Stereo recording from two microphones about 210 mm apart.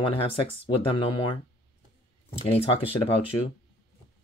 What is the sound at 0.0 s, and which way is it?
Speech, 30° left (ahead or behind).